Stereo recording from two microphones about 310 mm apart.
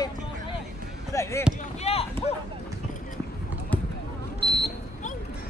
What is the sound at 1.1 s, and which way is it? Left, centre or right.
Speech, centre.